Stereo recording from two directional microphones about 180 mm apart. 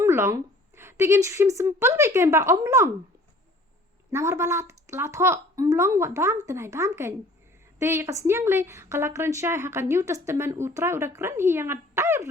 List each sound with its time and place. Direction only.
0.0 s a woman's voice: 15° right (ahead or behind)
4.1 s a woman's voice: 15° right (ahead or behind)